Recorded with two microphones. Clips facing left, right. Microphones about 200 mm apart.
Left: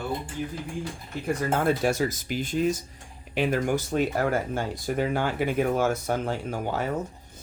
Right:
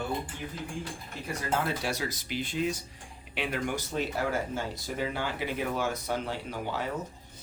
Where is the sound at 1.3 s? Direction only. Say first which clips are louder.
Left 7 dB; 50° left (ahead or behind).